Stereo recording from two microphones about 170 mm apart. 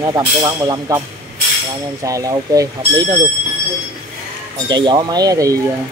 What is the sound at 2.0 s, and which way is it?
Speech, 20° right (ahead or behind).